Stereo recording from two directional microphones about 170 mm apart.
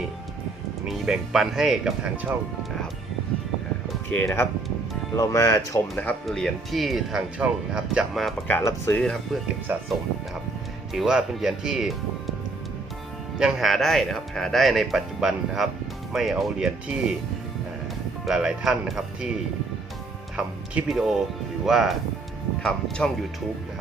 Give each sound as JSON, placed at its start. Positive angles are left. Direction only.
{"t": 0.9, "sound": "speech", "side_deg": 0}
{"t": 4.1, "sound": "speech", "side_deg": 10}
{"t": 5.9, "sound": "speech", "side_deg": 5}
{"t": 8.4, "sound": "speech", "side_deg": 15}
{"t": 10.9, "sound": "speech", "side_deg": -5}
{"t": 13.4, "sound": "speech", "side_deg": 0}
{"t": 18.3, "sound": "speech", "side_deg": 0}
{"t": 20.3, "sound": "speech", "side_deg": -5}